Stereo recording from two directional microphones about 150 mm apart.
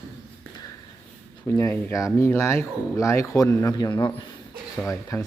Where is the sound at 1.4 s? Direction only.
20° left (ahead or behind).